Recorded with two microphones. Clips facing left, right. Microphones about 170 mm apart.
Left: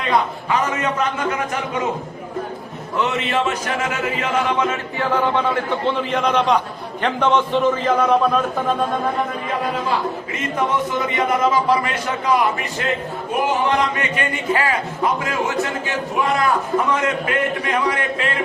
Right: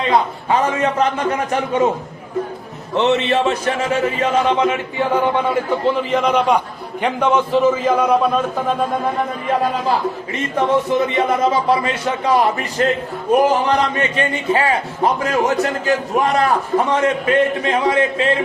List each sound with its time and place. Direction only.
0.1 s speech: 30° right (ahead or behind)
2.9 s speech: 30° right (ahead or behind)
4.9 s a man's voice: 15° right (ahead or behind)
10.8 s a man's voice: 30° right (ahead or behind)